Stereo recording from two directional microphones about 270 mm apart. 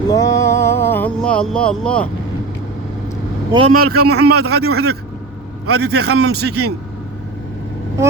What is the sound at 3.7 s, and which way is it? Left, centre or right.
A man's voice, right.